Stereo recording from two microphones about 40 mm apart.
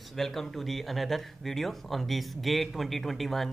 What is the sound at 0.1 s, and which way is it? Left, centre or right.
Speech, centre.